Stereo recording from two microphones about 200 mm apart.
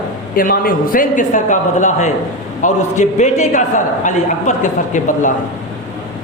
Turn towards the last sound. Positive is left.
turn(degrees=40)  # may be behind; listen again after turning